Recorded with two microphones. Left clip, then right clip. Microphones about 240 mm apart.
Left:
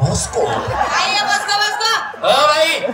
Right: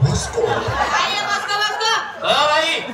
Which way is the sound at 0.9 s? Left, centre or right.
Left.